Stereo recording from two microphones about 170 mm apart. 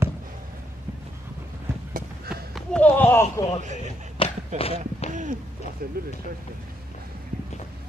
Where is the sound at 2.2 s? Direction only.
Centre (ahead or behind).